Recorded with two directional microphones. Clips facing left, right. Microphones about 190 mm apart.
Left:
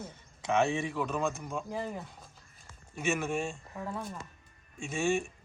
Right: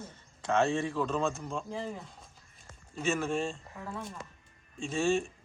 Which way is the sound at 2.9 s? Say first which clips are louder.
Right 1 dB; 10° left (ahead or behind).